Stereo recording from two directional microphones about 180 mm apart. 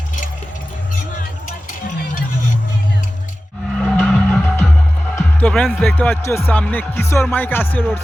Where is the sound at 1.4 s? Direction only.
45° left (ahead or behind).